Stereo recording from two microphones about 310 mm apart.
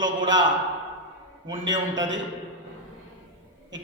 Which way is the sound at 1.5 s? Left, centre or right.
Right.